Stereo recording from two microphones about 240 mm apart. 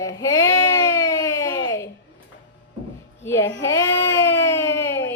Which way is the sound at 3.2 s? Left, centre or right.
Centre.